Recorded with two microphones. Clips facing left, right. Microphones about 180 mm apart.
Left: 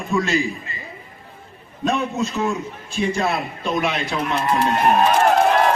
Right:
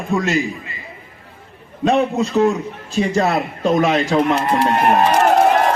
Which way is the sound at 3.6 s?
45° right (ahead or behind).